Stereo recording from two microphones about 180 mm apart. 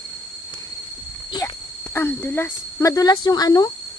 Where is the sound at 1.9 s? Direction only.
10° left (ahead or behind).